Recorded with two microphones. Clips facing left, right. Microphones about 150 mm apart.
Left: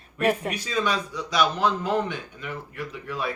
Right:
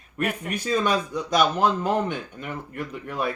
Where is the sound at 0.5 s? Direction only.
50° right (ahead or behind).